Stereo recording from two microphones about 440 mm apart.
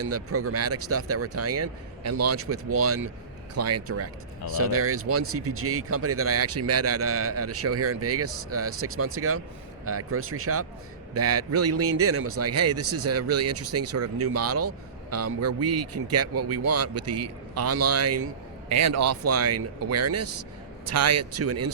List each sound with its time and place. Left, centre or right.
0.0 s speech: right